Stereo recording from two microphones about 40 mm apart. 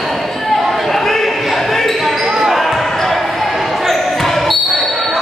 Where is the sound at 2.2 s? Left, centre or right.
Centre.